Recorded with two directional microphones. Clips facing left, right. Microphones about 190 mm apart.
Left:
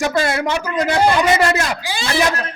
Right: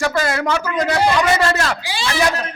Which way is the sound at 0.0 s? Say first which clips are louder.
Left 1 dB; 25° left (ahead or behind).